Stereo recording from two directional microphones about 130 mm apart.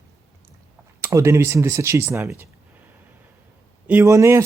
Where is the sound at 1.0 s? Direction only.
20° right (ahead or behind).